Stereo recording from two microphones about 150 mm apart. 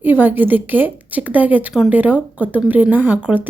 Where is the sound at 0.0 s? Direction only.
10° right (ahead or behind).